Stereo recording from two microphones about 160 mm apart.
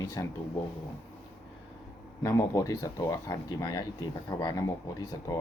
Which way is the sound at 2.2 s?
20° left (ahead or behind).